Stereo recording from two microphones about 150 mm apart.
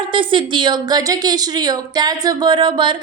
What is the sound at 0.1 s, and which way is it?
A woman's voice, 35° right (ahead or behind).